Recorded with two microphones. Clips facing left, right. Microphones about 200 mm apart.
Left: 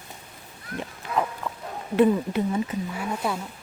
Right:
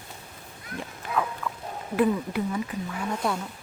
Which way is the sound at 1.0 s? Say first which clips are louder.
Left 1 dB; 50° right (ahead or behind).